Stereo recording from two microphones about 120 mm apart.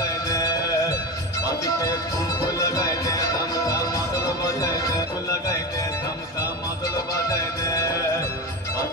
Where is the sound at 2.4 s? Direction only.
25° left (ahead or behind).